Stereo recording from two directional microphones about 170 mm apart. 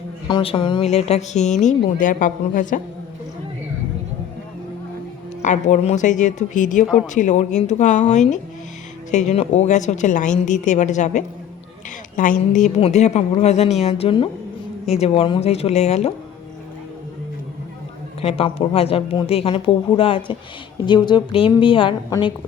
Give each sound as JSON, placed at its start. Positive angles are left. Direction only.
{"t": 0.3, "sound": "speech", "side_deg": 30}
{"t": 5.4, "sound": "speech", "side_deg": 45}
{"t": 6.8, "sound": "speech", "side_deg": -5}
{"t": 7.1, "sound": "a woman's voice", "side_deg": 45}
{"t": 18.2, "sound": "a woman's voice", "side_deg": 35}